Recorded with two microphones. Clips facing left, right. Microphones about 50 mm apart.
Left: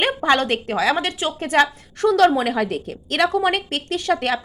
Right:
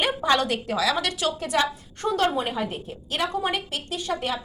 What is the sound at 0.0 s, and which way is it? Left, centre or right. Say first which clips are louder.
A woman's voice: left 4 dB; left.